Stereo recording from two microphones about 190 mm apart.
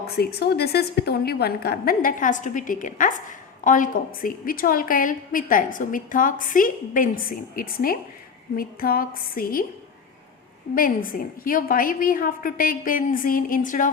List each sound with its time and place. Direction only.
0.2 s a woman's voice: 55° left (ahead or behind)
10.8 s a woman's voice: 50° left (ahead or behind)